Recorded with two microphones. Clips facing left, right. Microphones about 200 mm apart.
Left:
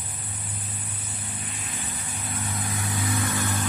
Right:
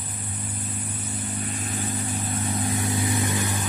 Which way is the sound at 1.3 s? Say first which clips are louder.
Right 7 dB; 40° right (ahead or behind).